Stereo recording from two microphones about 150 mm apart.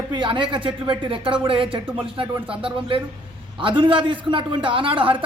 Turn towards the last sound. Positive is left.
turn(degrees=-35)  # may be behind; listen again after turning